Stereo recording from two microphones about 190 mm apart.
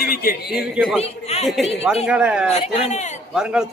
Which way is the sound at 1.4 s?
Centre (ahead or behind).